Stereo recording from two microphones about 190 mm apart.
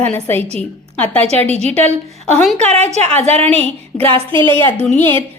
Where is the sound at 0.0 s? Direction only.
10° left (ahead or behind).